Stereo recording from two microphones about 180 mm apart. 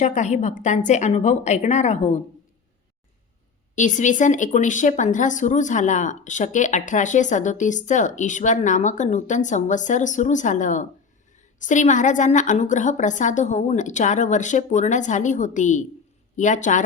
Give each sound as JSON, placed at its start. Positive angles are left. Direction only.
{"t": 0.0, "sound": "a woman's voice", "side_deg": 40}
{"t": 3.8, "sound": "speech", "side_deg": 45}